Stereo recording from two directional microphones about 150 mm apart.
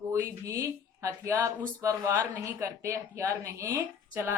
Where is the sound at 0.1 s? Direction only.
20° right (ahead or behind).